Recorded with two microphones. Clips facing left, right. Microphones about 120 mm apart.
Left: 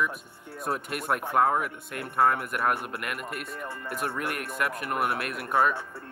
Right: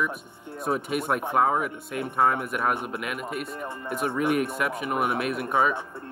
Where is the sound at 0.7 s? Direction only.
Centre (ahead or behind).